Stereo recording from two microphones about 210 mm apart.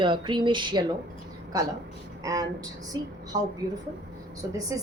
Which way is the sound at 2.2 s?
15° right (ahead or behind).